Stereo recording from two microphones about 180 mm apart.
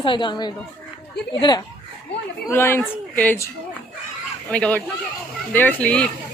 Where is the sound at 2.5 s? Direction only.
15° left (ahead or behind).